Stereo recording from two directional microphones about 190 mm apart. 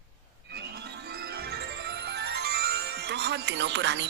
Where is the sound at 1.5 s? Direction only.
60° right (ahead or behind).